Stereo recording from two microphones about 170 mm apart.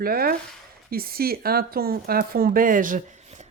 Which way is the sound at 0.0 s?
60° right (ahead or behind).